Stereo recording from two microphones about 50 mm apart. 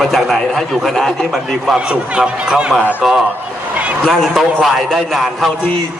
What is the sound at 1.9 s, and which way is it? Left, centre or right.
Speech, centre.